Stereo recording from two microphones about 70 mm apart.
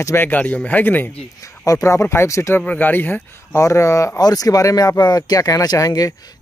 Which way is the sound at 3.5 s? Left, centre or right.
Left.